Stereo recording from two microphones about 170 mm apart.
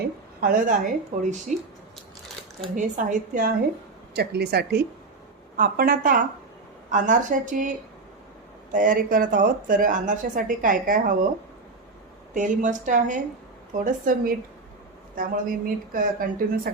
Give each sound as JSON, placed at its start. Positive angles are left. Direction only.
{"t": 0.4, "sound": "speech", "side_deg": -55}
{"t": 2.7, "sound": "speech", "side_deg": -50}
{"t": 4.1, "sound": "speech", "side_deg": -70}
{"t": 5.5, "sound": "a woman's voice", "side_deg": -60}
{"t": 8.7, "sound": "speech", "side_deg": -50}
{"t": 12.3, "sound": "a woman's voice", "side_deg": -50}